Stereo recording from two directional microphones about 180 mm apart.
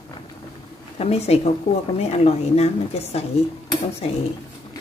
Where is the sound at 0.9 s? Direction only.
35° left (ahead or behind).